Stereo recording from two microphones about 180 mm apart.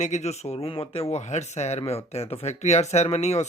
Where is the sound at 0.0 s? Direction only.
40° left (ahead or behind).